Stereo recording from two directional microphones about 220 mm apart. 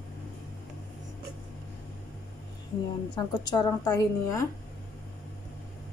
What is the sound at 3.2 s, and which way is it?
A woman's voice, 20° left (ahead or behind).